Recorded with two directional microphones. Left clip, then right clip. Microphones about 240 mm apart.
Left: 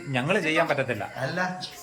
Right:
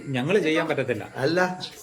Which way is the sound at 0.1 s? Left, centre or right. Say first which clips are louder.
Right 2 dB; centre.